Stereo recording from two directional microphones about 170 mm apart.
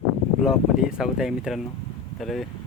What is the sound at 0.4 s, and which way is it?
Speech, 5° right (ahead or behind).